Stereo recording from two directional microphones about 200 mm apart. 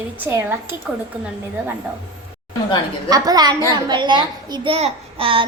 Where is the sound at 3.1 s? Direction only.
20° right (ahead or behind).